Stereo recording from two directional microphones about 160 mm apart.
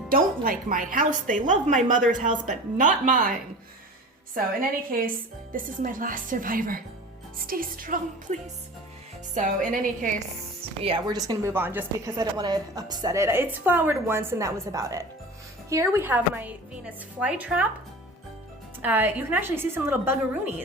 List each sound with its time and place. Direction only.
0.1 s a woman's voice: 60° right (ahead or behind)
4.9 s a woman's voice: 60° right (ahead or behind)
10.8 s speech: 30° right (ahead or behind)
11.5 s a woman's voice: 15° right (ahead or behind)
18.8 s a woman's voice: 10° right (ahead or behind)